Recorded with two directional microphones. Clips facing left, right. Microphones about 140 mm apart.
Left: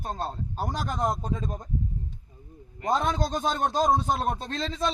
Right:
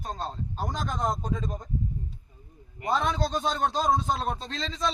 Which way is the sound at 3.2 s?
45° left (ahead or behind).